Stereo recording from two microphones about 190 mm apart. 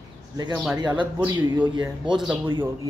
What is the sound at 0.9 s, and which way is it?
Speech, 10° right (ahead or behind).